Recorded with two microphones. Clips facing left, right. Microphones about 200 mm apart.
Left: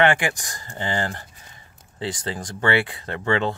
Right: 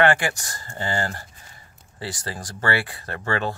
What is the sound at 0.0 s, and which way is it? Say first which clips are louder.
Speech: even; 20° left (ahead or behind).